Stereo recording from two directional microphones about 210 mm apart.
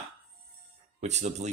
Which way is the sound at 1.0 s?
30° right (ahead or behind).